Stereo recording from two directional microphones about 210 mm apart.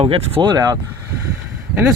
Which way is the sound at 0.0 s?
25° right (ahead or behind).